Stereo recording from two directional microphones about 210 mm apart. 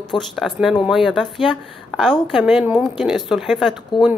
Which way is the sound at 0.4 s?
Centre (ahead or behind).